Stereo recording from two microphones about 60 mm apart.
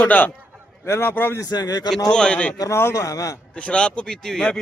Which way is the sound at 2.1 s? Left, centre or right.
Centre.